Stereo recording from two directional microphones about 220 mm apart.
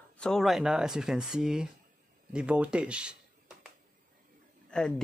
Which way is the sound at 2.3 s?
5° right (ahead or behind).